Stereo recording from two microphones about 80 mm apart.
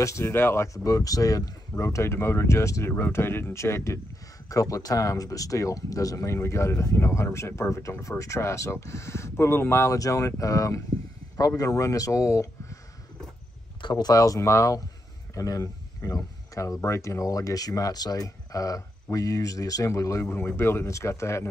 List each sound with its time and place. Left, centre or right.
0.0 s speech: left
0.8 s speech: left
13.7 s speech: left
20.3 s speech: left